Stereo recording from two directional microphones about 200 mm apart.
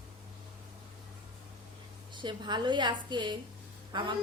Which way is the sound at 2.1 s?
25° right (ahead or behind).